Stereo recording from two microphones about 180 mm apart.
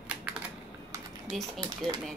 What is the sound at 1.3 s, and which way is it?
Speech, centre (ahead or behind).